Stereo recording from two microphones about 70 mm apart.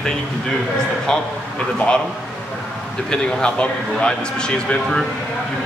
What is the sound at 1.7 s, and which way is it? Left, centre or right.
Speech, centre.